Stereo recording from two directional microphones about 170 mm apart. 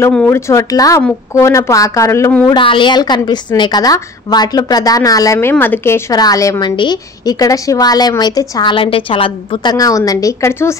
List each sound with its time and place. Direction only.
0.0 s a woman's voice: 10° left (ahead or behind)
2.5 s a woman's voice: 30° left (ahead or behind)